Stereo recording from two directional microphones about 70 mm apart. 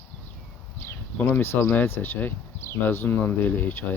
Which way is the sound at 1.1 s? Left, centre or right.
Left.